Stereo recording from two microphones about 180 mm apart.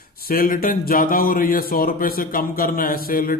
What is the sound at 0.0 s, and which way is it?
Speech, 55° left (ahead or behind).